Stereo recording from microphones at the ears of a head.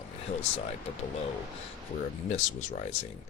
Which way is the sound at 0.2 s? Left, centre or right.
Left.